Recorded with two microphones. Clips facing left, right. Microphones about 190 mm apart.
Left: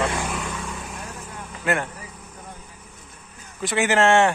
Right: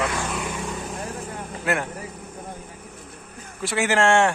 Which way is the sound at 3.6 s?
Centre (ahead or behind).